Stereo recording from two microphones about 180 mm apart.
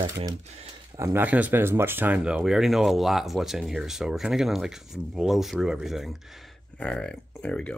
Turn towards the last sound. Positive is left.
turn(degrees=5)  # may be behind; listen again after turning